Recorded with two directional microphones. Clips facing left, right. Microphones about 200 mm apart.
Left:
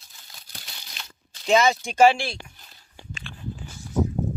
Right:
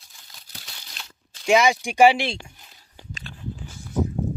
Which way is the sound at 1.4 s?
15° right (ahead or behind).